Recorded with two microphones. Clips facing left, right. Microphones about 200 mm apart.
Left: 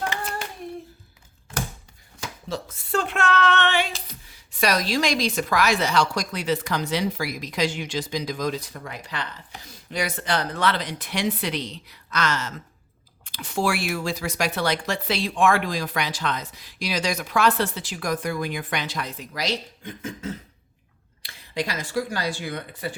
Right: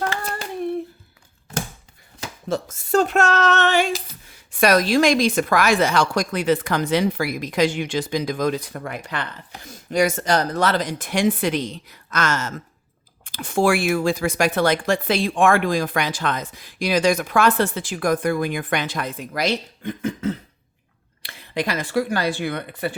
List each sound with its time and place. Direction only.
0.1 s hands: 15° left (ahead or behind)
2.5 s speech: 45° right (ahead or behind); by 23.0 s 65° right (ahead or behind)